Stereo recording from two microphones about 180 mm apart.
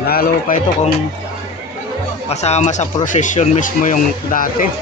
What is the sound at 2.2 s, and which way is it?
Speech, 35° left (ahead or behind).